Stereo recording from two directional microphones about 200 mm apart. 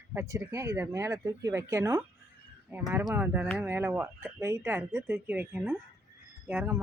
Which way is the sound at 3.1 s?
10° right (ahead or behind).